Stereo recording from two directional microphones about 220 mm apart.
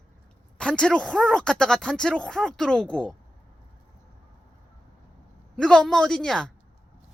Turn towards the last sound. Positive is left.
turn(degrees=5)  # may be behind; listen again after turning